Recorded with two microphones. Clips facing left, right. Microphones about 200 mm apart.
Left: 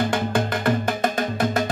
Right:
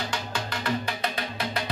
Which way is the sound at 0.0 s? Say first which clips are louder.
Left 10 dB; 55° left (ahead or behind).